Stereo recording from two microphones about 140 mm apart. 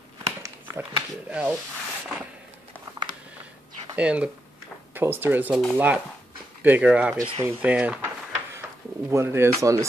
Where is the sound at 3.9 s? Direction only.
10° right (ahead or behind).